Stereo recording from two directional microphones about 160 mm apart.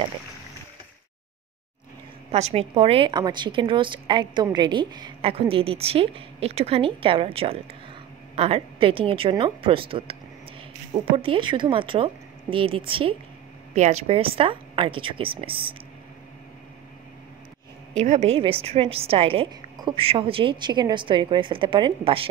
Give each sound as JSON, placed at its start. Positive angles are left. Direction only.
{"t": 2.3, "sound": "a woman's voice", "side_deg": -40}
{"t": 13.7, "sound": "a woman's voice", "side_deg": -45}
{"t": 17.9, "sound": "a woman's voice", "side_deg": -45}